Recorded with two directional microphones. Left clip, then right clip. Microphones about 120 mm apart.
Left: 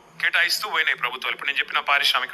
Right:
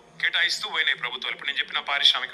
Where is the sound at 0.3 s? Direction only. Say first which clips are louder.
Left 3 dB; 30° left (ahead or behind).